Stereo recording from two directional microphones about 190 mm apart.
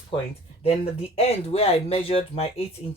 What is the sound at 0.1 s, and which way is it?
Speech, 25° left (ahead or behind).